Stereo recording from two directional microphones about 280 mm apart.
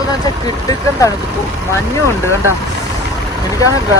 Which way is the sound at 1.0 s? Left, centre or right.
Centre.